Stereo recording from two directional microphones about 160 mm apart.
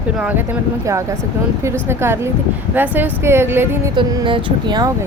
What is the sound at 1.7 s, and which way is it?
Speech, 15° right (ahead or behind).